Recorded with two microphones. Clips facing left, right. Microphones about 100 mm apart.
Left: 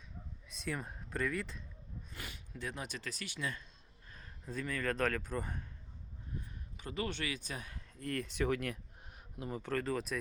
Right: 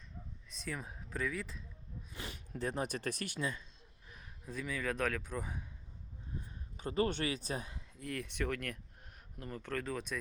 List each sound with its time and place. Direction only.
0.5 s speech: centre (ahead or behind)
2.3 s speech: 40° right (ahead or behind)
4.4 s a man's voice: 5° right (ahead or behind)
6.7 s speech: 35° right (ahead or behind)
7.9 s a man's voice: 5° right (ahead or behind)